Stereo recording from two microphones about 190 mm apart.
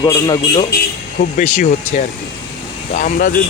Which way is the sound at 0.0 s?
20° left (ahead or behind).